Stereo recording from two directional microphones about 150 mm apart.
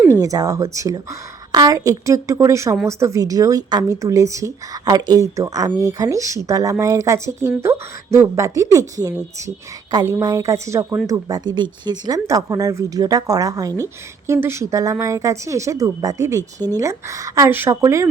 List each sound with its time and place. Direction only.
0.0 s a woman's voice: 20° right (ahead or behind)
9.9 s a woman's voice: 25° right (ahead or behind)